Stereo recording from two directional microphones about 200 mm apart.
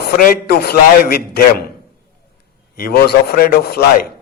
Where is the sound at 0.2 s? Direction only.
50° left (ahead or behind).